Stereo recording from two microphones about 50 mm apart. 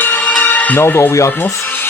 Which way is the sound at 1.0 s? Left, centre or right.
Left.